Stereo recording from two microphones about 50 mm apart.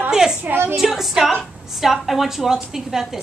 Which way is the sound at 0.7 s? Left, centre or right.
Centre.